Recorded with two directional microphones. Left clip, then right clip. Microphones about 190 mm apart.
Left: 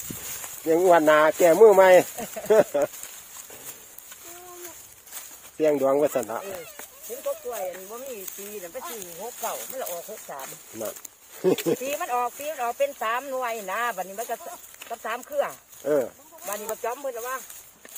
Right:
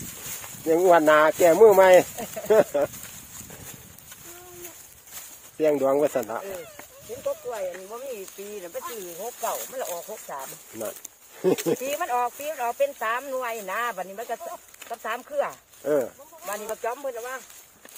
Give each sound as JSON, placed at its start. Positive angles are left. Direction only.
{"t": 0.7, "sound": "speech", "side_deg": 0}
{"t": 5.6, "sound": "speech", "side_deg": 0}
{"t": 9.4, "sound": "speech", "side_deg": -25}
{"t": 10.1, "sound": "speech", "side_deg": -10}